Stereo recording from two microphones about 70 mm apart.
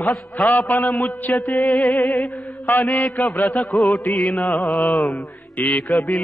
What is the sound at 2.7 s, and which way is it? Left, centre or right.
Mantra, left.